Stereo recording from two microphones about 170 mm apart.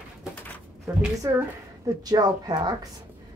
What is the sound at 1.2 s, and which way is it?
A woman's voice, 20° right (ahead or behind).